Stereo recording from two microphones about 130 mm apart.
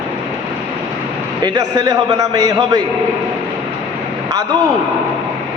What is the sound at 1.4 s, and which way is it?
A man's voice, 30° right (ahead or behind).